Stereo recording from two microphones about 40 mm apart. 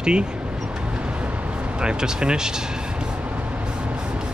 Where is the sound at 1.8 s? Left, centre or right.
Right.